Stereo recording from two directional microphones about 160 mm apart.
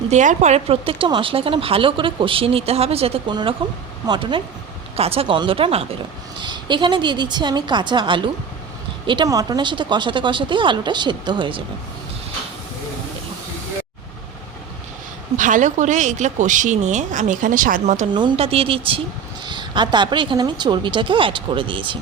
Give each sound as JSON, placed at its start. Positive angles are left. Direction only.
{"t": 0.1, "sound": "speech", "side_deg": -50}
{"t": 15.4, "sound": "speech", "side_deg": -55}
{"t": 18.1, "sound": "speech", "side_deg": -30}